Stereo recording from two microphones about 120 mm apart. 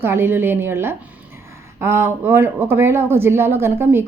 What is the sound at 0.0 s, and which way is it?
A woman's voice, 20° right (ahead or behind).